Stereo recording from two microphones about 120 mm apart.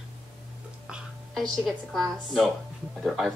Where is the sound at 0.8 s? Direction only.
5° right (ahead or behind).